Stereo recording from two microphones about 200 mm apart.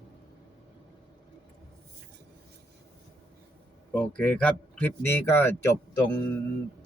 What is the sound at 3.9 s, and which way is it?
Speech, 5° left (ahead or behind).